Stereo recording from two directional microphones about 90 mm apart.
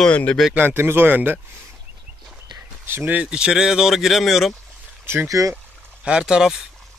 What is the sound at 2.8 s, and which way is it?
Speech, 20° right (ahead or behind).